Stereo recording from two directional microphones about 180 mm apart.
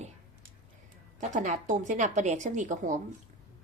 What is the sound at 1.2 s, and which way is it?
A woman's voice, 40° right (ahead or behind).